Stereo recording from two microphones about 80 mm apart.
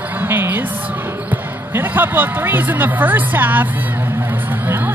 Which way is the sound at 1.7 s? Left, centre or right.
Right.